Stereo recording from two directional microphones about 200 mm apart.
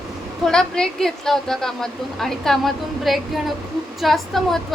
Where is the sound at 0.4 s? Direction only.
Centre (ahead or behind).